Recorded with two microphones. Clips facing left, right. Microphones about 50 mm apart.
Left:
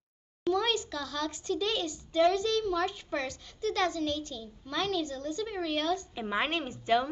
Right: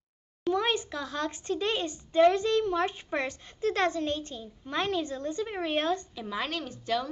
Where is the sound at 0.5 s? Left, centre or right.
Right.